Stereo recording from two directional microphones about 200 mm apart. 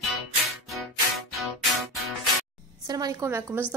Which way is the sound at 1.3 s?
Centre (ahead or behind).